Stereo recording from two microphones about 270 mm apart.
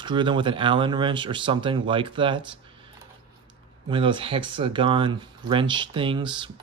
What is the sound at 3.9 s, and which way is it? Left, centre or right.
Speech, centre.